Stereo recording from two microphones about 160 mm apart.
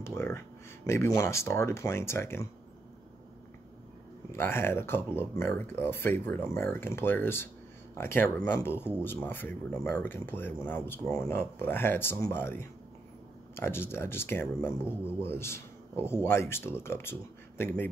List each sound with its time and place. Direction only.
0.0 s speech: 15° left (ahead or behind)
4.3 s speech: 15° left (ahead or behind)